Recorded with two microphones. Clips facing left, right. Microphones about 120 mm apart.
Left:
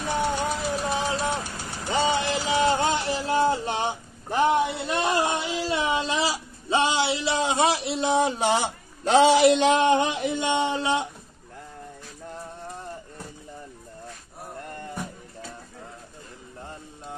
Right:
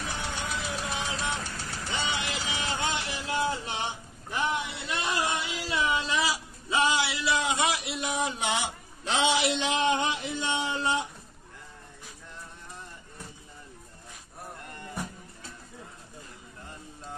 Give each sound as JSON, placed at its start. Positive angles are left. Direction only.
{"t": 0.0, "sound": "vehicle", "side_deg": 45}
{"t": 1.4, "sound": "vehicle", "side_deg": 15}
{"t": 1.9, "sound": "a sound", "side_deg": 40}